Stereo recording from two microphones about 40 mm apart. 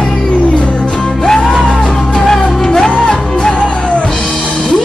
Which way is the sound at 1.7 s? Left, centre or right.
Left.